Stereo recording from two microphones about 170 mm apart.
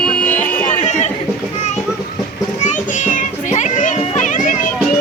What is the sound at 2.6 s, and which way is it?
Children playing, 45° left (ahead or behind).